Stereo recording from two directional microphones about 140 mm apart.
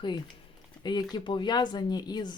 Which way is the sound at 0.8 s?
30° left (ahead or behind).